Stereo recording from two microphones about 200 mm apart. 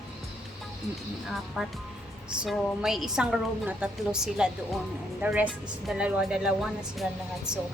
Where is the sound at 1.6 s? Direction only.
5° right (ahead or behind).